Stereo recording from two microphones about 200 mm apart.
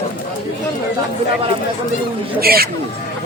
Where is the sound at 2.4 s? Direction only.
50° right (ahead or behind).